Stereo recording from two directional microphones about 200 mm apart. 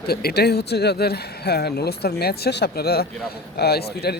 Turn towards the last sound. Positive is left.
turn(degrees=55)  # may be behind; listen again after turning